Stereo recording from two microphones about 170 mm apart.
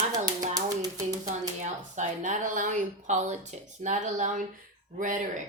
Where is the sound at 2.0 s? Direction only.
45° right (ahead or behind).